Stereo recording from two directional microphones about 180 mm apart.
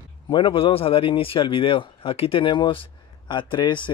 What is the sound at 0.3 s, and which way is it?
A man's voice, 30° left (ahead or behind).